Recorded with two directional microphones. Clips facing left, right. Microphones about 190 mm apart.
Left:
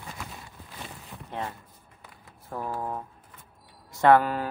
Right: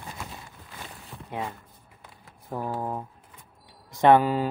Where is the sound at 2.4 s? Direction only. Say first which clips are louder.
Right 2 dB; 20° right (ahead or behind).